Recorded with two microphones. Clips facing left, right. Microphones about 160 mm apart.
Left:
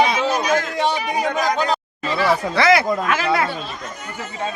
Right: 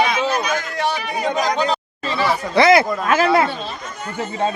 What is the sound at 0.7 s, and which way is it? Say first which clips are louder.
Speech: left 2 dB; 20° left (ahead or behind).